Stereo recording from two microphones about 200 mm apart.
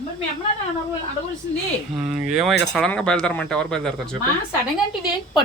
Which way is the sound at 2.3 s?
Centre (ahead or behind).